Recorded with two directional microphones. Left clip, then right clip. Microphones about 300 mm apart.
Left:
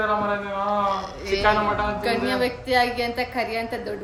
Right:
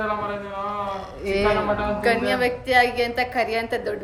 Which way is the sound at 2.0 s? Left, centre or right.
Centre.